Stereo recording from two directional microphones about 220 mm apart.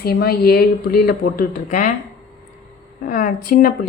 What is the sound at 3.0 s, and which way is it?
Speech, 40° left (ahead or behind).